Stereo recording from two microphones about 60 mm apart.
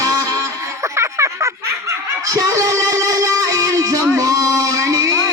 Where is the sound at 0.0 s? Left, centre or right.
Right.